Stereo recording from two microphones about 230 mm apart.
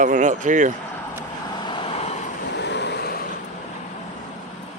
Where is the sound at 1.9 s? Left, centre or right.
Left.